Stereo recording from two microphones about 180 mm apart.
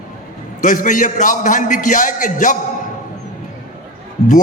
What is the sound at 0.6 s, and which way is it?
A man's voice, 45° left (ahead or behind).